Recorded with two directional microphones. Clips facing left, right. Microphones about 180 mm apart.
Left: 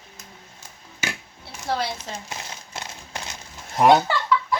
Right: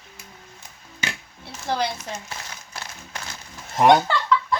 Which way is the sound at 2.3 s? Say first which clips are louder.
Left 2 dB; 25° left (ahead or behind).